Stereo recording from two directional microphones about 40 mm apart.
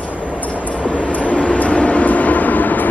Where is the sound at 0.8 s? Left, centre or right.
Left.